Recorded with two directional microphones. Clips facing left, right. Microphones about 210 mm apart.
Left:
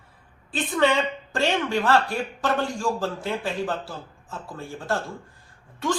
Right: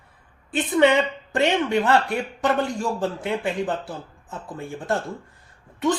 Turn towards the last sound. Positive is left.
turn(degrees=-20)  # may be behind; listen again after turning